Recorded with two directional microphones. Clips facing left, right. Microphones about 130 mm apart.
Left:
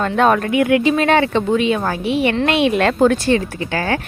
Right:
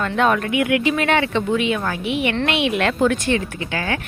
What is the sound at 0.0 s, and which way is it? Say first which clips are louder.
A woman's voice: left 4 dB; 40° left (ahead or behind).